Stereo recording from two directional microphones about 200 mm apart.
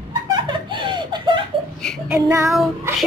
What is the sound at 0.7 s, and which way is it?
Giggle, 25° right (ahead or behind).